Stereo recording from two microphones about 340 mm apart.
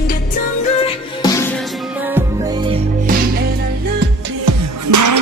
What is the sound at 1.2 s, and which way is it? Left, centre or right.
Music, centre.